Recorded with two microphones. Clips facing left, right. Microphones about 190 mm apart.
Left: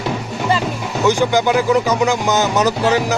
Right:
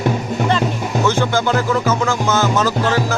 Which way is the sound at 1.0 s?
15° left (ahead or behind).